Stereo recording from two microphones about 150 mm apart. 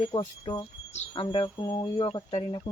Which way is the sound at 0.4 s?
30° left (ahead or behind).